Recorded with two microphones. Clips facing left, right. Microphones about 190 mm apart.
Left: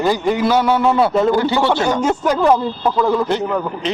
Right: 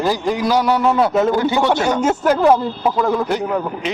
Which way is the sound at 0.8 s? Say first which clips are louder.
Left 1 dB; 5° left (ahead or behind).